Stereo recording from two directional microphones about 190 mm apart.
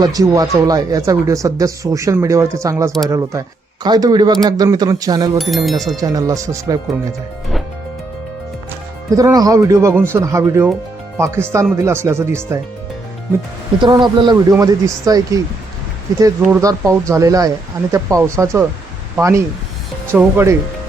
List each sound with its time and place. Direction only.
0.0 s speech: 20° right (ahead or behind)
5.4 s speech: centre (ahead or behind)
6.0 s speech: 20° right (ahead or behind)
9.0 s speech: 20° right (ahead or behind)
13.8 s speech: 25° right (ahead or behind)